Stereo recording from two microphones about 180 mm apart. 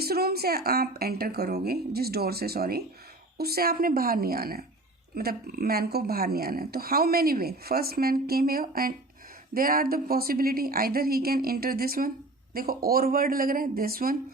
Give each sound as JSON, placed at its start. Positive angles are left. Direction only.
{"t": 0.0, "sound": "speech", "side_deg": -60}